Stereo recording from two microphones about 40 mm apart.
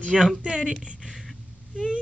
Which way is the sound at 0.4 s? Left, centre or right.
Right.